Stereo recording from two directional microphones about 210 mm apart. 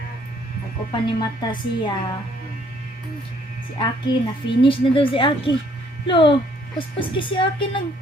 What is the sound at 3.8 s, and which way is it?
A woman's voice, 25° left (ahead or behind).